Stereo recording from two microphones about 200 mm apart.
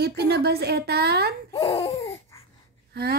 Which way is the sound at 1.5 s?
30° left (ahead or behind).